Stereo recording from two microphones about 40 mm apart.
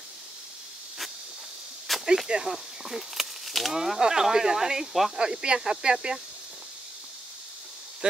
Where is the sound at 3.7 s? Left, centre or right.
Centre.